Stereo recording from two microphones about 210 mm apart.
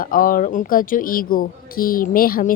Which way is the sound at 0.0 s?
40° left (ahead or behind).